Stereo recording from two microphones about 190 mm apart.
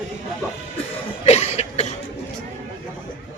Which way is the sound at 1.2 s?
35° left (ahead or behind).